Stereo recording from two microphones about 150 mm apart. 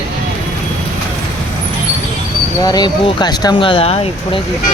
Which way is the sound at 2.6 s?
25° left (ahead or behind).